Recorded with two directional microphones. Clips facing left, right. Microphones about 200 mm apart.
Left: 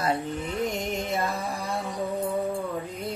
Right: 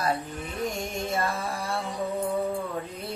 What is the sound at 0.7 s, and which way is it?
Music, 20° left (ahead or behind).